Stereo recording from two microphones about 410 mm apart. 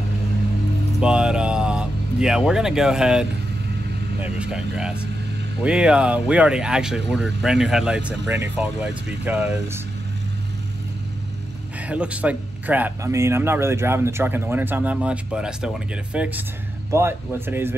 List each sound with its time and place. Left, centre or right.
1.0 s speech: centre
11.9 s speech: centre